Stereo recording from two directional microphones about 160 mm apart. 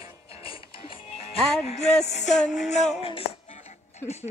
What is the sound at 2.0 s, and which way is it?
Music, 45° left (ahead or behind).